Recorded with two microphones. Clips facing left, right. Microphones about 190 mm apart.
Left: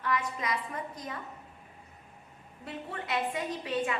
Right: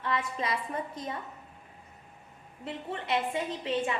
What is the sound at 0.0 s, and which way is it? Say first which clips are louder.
A woman's voice: even; 25° right (ahead or behind).